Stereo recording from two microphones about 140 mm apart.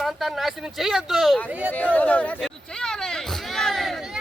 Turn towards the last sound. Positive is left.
turn(degrees=5)  # may be behind; listen again after turning